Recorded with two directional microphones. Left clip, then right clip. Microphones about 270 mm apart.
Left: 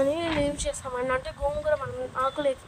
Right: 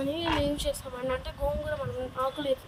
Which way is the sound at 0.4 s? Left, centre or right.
Centre.